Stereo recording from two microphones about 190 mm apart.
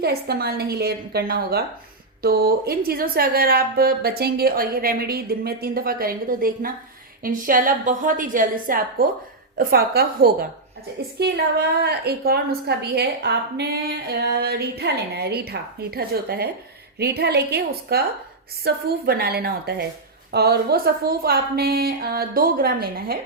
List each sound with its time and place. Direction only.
0.0 s a woman's voice: 55° right (ahead or behind)